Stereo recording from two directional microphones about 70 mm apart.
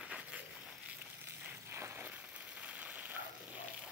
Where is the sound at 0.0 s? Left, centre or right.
Centre.